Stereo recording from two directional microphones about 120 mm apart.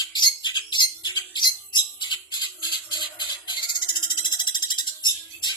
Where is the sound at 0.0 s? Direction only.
35° left (ahead or behind).